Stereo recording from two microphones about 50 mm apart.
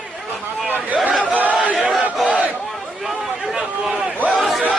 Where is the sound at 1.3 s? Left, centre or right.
Right.